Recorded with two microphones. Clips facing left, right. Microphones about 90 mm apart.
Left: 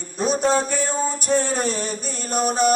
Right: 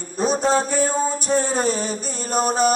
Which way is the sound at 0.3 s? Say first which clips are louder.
Right 1 dB; centre (ahead or behind).